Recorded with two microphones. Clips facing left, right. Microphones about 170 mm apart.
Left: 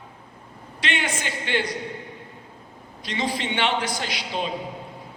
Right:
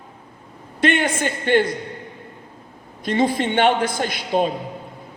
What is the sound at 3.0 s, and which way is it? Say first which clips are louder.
A man's voice: right 8 dB; 50° right (ahead or behind).